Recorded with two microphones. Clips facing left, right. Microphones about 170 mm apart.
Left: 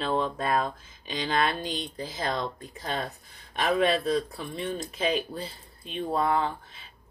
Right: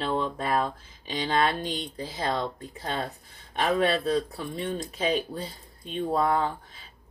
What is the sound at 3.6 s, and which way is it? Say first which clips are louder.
Speech: even; 35° right (ahead or behind).